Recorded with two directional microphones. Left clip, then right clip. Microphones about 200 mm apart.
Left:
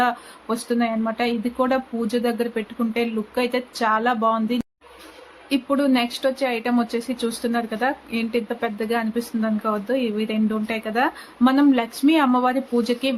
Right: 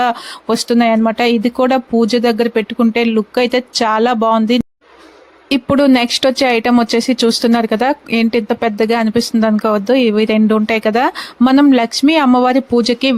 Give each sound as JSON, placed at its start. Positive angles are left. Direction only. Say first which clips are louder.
{"t": 0.0, "sound": "speech", "louder": "right 6 dB", "side_deg": -50}